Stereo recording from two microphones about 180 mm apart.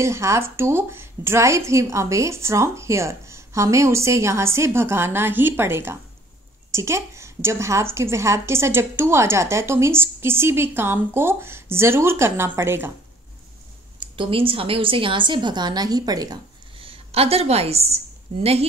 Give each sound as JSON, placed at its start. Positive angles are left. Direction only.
{"t": 0.0, "sound": "a woman's voice", "side_deg": -15}
{"t": 13.9, "sound": "a woman's voice", "side_deg": -30}